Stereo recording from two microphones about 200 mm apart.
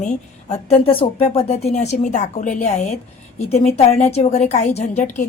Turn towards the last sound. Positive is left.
turn(degrees=35)  # may be behind; listen again after turning